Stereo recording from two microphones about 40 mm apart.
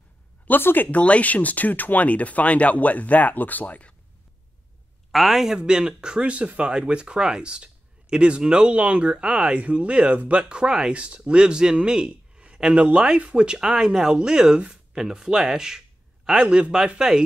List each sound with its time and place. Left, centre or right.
0.6 s speech: left
0.9 s speech: left
5.1 s speech: centre
5.6 s a man's voice: right
13.4 s speech: centre
16.3 s speech: right
17.0 s speech: centre